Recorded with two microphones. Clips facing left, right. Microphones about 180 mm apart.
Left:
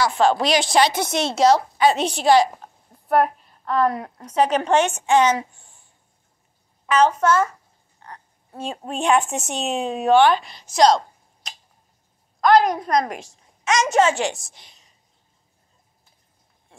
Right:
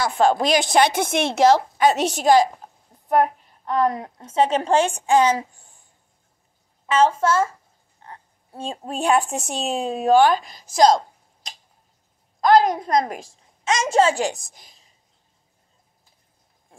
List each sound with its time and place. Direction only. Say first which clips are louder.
0.0 s speech: even; 50° right (ahead or behind)
1.8 s speech: even; 45° right (ahead or behind)
3.1 s a woman's voice: even; 20° right (ahead or behind)
6.9 s a woman's voice: left 1 dB; 25° right (ahead or behind)
8.5 s speech: even; 30° right (ahead or behind)
12.4 s a woman's voice: even; 25° right (ahead or behind)